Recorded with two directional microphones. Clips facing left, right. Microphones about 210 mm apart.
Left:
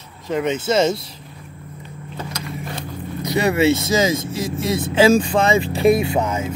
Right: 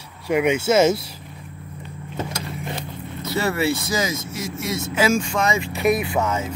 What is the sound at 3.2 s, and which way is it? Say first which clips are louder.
Speech: left 5 dB; 15° left (ahead or behind).